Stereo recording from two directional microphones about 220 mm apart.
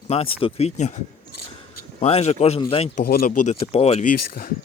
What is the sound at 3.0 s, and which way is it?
Speech, 40° left (ahead or behind).